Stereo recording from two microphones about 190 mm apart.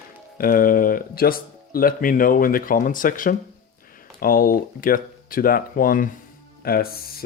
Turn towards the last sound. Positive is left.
turn(degrees=50)  # may be behind; listen again after turning